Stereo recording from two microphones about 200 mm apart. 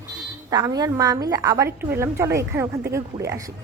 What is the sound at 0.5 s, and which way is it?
A woman's voice, 20° right (ahead or behind).